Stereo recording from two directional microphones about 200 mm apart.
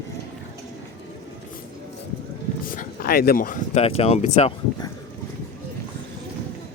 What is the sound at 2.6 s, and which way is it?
Speech, 45° left (ahead or behind).